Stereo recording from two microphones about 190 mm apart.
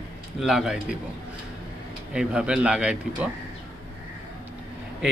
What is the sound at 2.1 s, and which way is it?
Speech, 5° right (ahead or behind).